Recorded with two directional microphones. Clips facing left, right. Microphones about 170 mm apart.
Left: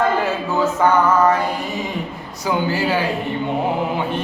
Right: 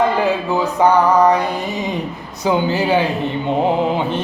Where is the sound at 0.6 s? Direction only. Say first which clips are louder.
Right 1 dB; 15° right (ahead or behind).